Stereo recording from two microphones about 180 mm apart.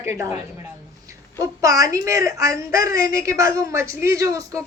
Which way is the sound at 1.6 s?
20° right (ahead or behind).